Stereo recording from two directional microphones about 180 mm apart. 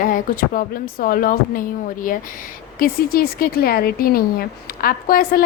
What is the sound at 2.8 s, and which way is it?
A woman's voice, 55° left (ahead or behind).